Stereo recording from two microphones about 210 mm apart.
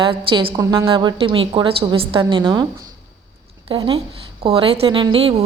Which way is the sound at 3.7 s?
25° right (ahead or behind).